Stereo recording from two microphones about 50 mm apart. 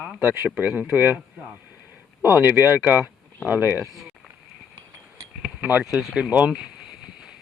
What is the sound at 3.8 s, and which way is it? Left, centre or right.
Speech, centre.